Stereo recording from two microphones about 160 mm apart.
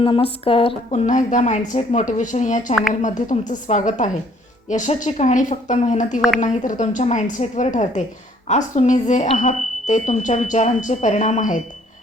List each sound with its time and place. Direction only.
0.0 s speech: 35° left (ahead or behind)
0.9 s speech: 50° left (ahead or behind)